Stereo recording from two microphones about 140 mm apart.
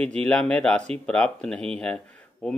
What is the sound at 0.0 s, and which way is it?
Speech, 10° left (ahead or behind).